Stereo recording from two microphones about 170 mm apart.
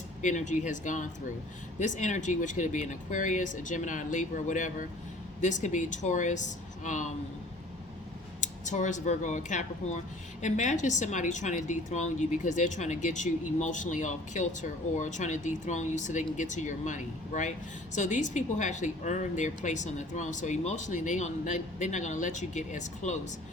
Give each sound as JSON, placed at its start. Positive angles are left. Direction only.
{"t": 0.2, "sound": "a woman's voice", "side_deg": 45}
{"t": 8.4, "sound": "a woman's voice", "side_deg": 45}